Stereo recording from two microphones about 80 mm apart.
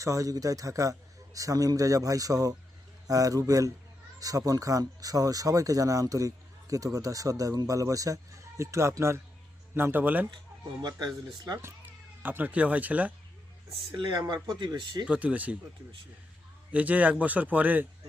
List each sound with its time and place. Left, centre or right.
0.0 s speech: right
11.6 s speech: right
13.9 s speech: right
14.2 s speech: right
15.0 s speech: centre
16.7 s speech: centre